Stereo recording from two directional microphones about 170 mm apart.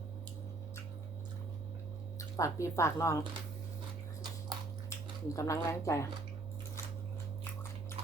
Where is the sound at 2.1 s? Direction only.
20° left (ahead or behind).